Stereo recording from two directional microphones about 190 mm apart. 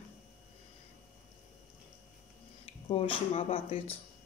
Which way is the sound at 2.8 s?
30° left (ahead or behind).